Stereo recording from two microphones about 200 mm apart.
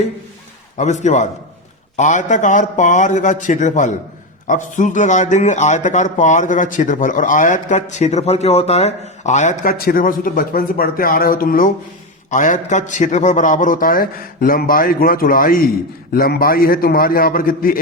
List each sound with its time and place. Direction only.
1.0 s a man's voice: 35° left (ahead or behind)